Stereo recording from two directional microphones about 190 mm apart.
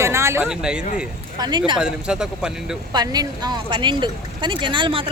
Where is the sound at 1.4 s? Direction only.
25° right (ahead or behind).